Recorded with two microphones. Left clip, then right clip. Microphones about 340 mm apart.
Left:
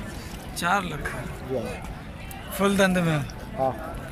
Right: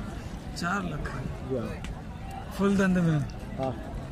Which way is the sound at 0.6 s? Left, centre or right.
Centre.